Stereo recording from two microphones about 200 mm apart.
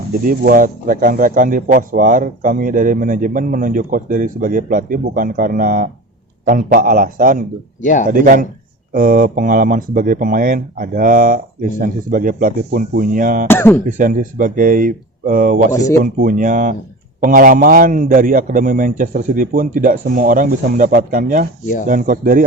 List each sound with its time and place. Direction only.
0.3 s speech: 45° right (ahead or behind)
7.8 s speech: 40° left (ahead or behind)
8.1 s speech: 45° right (ahead or behind)
13.5 s speech: 10° left (ahead or behind)
14.0 s speech: 45° right (ahead or behind)